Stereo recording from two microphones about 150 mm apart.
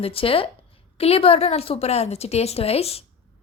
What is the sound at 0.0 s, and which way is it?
A woman's voice, 40° left (ahead or behind).